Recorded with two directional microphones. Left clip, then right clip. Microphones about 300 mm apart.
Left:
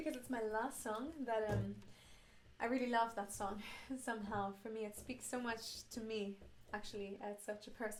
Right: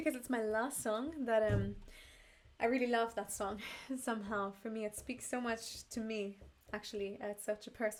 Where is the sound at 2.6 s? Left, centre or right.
Centre.